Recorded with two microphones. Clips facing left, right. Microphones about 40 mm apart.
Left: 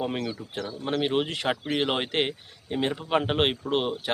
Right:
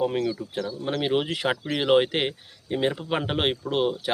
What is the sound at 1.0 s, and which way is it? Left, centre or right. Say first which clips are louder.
Speech: right 3 dB; centre.